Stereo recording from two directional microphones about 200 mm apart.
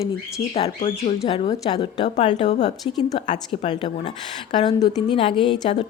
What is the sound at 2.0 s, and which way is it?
Speech, 35° left (ahead or behind).